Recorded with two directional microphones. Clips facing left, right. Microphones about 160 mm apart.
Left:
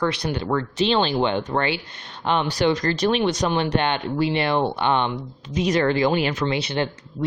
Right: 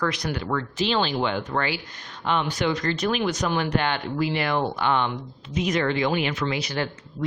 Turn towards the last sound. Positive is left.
turn(degrees=25)  # may be behind; listen again after turning